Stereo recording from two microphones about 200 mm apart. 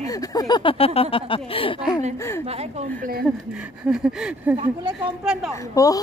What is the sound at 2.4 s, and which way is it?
Speech, 30° right (ahead or behind).